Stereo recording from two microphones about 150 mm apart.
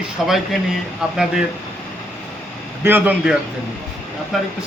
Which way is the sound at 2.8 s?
10° right (ahead or behind).